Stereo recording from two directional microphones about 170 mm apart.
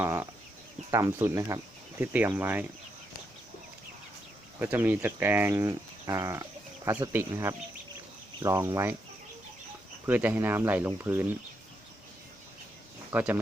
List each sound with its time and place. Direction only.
0.0 s speech: 15° right (ahead or behind)
4.6 s speech: 10° right (ahead or behind)
10.1 s speech: 10° right (ahead or behind)
13.1 s speech: 10° right (ahead or behind)